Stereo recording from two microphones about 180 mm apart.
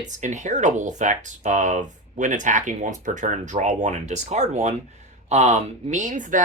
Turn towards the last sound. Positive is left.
turn(degrees=-45)  # may be behind; listen again after turning